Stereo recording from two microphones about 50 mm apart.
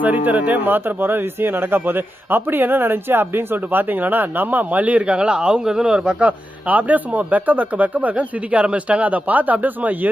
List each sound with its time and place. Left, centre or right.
0.0 s speech: right; by 6.1 s centre
6.1 s speech: right